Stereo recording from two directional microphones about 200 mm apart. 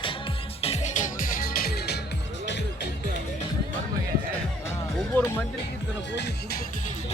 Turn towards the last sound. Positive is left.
turn(degrees=55)  # may be behind; listen again after turning